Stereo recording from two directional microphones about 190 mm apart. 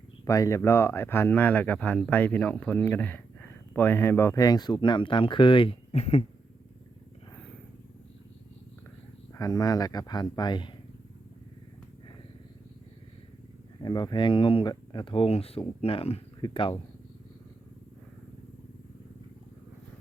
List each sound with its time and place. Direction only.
0.3 s speech: 15° left (ahead or behind); by 6.2 s 35° left (ahead or behind)
9.3 s speech: 15° left (ahead or behind)
13.8 s speech: 20° left (ahead or behind)